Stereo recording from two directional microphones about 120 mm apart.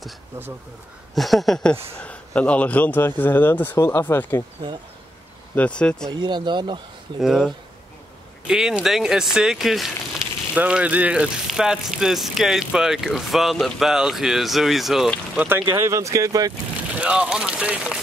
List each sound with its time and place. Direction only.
1.1 s speech: centre (ahead or behind); by 4.5 s 20° left (ahead or behind)
5.6 s speech: 10° left (ahead or behind)
6.2 s speech: 40° right (ahead or behind)
7.2 s speech: centre (ahead or behind)
15.3 s speech: 20° right (ahead or behind)
16.9 s speech: 10° right (ahead or behind)